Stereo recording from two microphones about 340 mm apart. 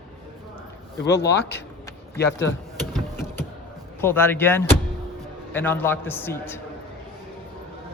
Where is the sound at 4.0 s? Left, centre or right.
Centre.